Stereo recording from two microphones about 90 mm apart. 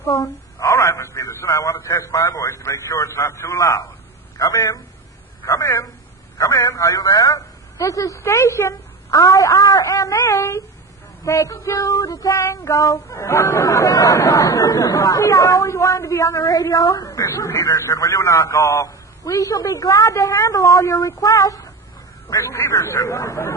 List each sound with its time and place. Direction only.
0.1 s a woman's voice: 40° left (ahead or behind)
2.3 s child singing: 35° left (ahead or behind)
5.5 s a man's voice: 30° left (ahead or behind)
6.7 s child singing: 40° left (ahead or behind)